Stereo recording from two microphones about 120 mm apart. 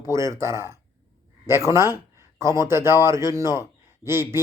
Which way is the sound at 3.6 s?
20° right (ahead or behind).